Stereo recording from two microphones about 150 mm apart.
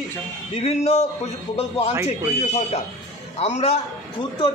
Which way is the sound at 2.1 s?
45° left (ahead or behind).